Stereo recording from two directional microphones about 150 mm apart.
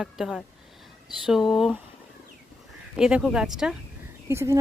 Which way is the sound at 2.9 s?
5° right (ahead or behind).